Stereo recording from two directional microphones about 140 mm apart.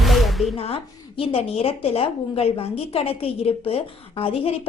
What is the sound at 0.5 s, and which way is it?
A woman's voice, 45° left (ahead or behind).